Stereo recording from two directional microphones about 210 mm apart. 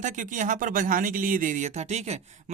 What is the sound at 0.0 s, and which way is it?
Speech, 35° right (ahead or behind).